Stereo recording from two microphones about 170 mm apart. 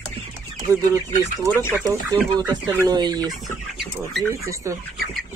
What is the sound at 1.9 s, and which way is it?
Speech, 25° right (ahead or behind).